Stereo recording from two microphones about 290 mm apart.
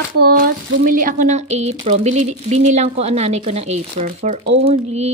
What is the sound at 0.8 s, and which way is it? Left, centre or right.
Speech, right.